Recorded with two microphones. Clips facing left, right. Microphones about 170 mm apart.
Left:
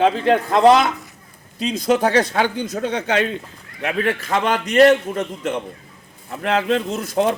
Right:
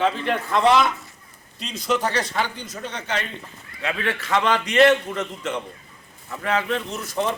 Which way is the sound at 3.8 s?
50° left (ahead or behind).